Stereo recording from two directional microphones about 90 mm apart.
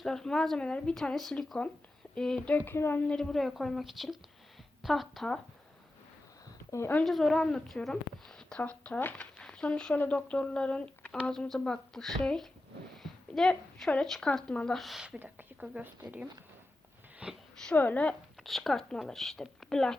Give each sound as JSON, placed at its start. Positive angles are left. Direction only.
{"t": 0.0, "sound": "a woman's voice", "side_deg": 5}
{"t": 3.1, "sound": "speech", "side_deg": 5}
{"t": 6.7, "sound": "speech", "side_deg": 30}
{"t": 7.0, "sound": "a woman's voice", "side_deg": 0}
{"t": 13.0, "sound": "a sound", "side_deg": 5}
{"t": 13.9, "sound": "a woman's voice", "side_deg": 10}
{"t": 15.6, "sound": "a woman's voice", "side_deg": -10}
{"t": 17.2, "sound": "speech", "side_deg": -10}
{"t": 17.7, "sound": "a woman's voice", "side_deg": 20}
{"t": 18.4, "sound": "speech", "side_deg": 0}